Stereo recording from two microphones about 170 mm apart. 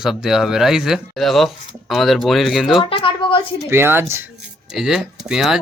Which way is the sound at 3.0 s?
30° left (ahead or behind).